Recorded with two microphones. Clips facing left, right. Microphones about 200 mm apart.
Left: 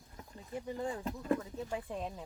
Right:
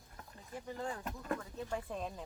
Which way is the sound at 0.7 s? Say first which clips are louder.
Left 3 dB; 20° left (ahead or behind).